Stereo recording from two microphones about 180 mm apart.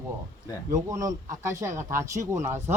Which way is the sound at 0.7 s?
20° right (ahead or behind).